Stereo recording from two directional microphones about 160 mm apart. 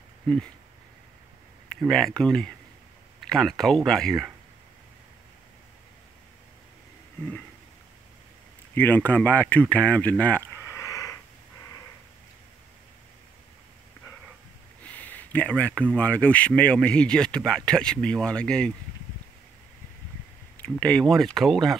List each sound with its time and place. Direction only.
0.3 s speech: 5° left (ahead or behind)
1.9 s speech: 5° left (ahead or behind)
8.7 s speech: 10° left (ahead or behind)
10.8 s a sound: 20° left (ahead or behind)
15.0 s a sound: 10° left (ahead or behind)
16.0 s speech: 10° left (ahead or behind)
20.8 s speech: 5° left (ahead or behind)